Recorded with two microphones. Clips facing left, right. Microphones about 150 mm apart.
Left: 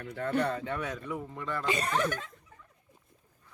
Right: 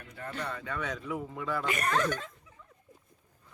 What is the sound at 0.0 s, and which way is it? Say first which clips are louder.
Speech: left 9 dB; 70° left (ahead or behind).